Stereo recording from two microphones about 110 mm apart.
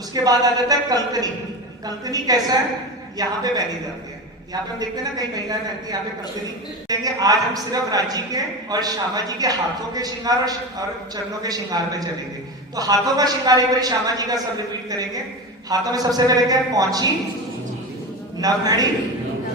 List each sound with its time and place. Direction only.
0.1 s speech: 35° right (ahead or behind)
18.3 s speech: 35° right (ahead or behind)